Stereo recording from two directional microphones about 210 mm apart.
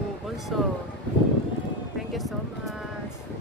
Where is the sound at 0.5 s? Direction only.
Centre (ahead or behind).